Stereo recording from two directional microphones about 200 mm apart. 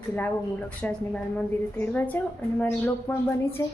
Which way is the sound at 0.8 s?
5° left (ahead or behind).